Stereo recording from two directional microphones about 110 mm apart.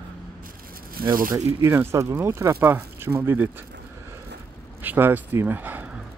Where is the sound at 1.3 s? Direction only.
25° right (ahead or behind).